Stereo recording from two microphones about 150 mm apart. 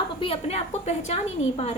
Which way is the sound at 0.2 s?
40° left (ahead or behind).